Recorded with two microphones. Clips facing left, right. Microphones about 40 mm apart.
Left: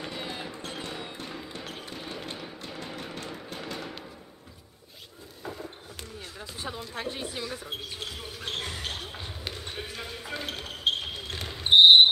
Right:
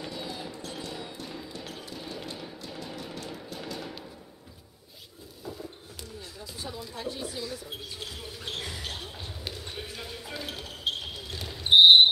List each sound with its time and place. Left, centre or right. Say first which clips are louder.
0.0 s music: left 1 dB; left
3.8 s a sound: left 1 dB; centre
5.9 s a sound: left 1 dB; left
6.8 s speech: right 1 dB; left
8.0 s basketball bounce: left 2 dB; centre
11.7 s basketball bounce: even; centre